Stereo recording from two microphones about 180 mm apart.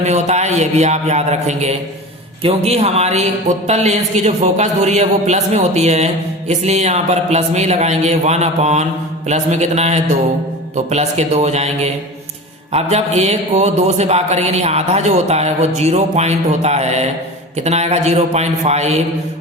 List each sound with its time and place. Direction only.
0.0 s a man's voice: 40° right (ahead or behind)